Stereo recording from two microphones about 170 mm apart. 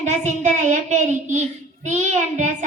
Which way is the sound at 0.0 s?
40° right (ahead or behind).